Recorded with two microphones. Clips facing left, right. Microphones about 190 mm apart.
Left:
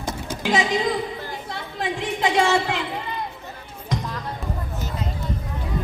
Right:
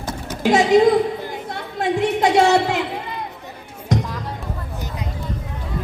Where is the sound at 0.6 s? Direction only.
70° right (ahead or behind).